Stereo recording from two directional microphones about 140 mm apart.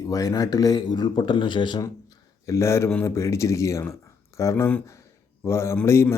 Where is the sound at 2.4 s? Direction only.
20° left (ahead or behind).